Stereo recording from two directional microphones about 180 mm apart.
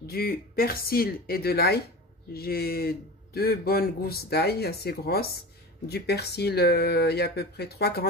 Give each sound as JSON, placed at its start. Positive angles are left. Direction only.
{"t": 0.0, "sound": "a man's voice", "side_deg": 55}